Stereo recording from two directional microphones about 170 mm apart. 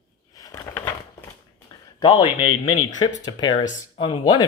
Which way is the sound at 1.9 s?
25° left (ahead or behind).